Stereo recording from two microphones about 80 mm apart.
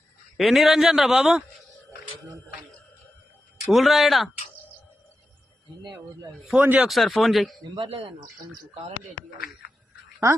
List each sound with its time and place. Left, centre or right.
0.3 s a man's voice: centre
3.7 s a man's voice: centre
6.6 s speech: centre
6.8 s a man's voice: centre
7.6 s speech: right